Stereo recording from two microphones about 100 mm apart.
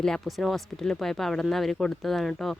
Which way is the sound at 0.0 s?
5° left (ahead or behind).